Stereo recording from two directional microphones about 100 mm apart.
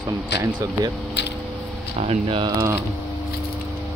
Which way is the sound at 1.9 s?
75° right (ahead or behind).